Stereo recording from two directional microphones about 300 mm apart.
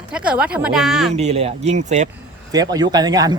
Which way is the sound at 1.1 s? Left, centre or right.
Right.